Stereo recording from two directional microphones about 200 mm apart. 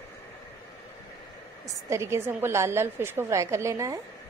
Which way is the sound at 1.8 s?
15° right (ahead or behind).